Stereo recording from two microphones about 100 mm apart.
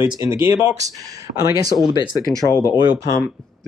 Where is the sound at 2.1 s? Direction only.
40° left (ahead or behind).